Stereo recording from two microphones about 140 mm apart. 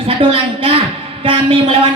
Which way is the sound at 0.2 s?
40° right (ahead or behind).